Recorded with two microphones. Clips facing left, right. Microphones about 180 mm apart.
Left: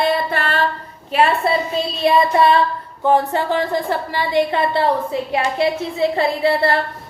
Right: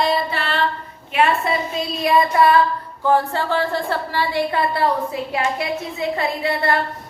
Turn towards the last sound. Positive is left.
turn(degrees=30)  # may be behind; listen again after turning